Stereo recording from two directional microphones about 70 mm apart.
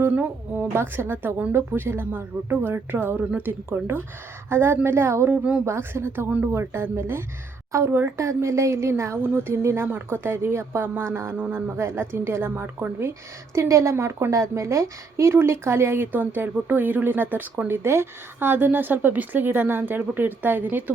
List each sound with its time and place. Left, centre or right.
0.1 s speech: right
8.1 s speech: right
9.2 s speech: right
13.6 s speech: right